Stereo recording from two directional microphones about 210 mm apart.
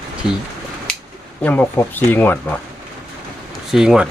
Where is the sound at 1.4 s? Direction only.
10° left (ahead or behind).